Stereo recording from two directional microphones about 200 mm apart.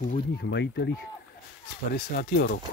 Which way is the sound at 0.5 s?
60° left (ahead or behind).